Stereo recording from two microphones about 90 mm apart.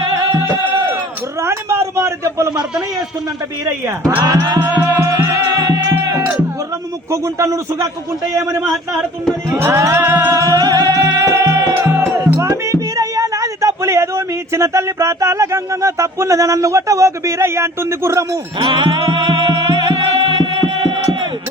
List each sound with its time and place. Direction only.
1.4 s a sound: 30° right (ahead or behind)
4.2 s a man's voice: 40° right (ahead or behind)
4.4 s music: 55° right (ahead or behind)
4.7 s music: 35° right (ahead or behind)
5.5 s music: 40° right (ahead or behind)
7.1 s a man's voice: 35° right (ahead or behind)
8.7 s speech: centre (ahead or behind)
9.6 s music: 35° right (ahead or behind)
10.3 s music: 40° right (ahead or behind)
10.9 s music: 35° right (ahead or behind)
11.9 s speech: 30° right (ahead or behind)
18.6 s music: 60° right (ahead or behind)